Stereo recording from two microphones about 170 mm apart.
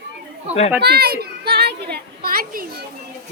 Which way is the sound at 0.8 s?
70° right (ahead or behind).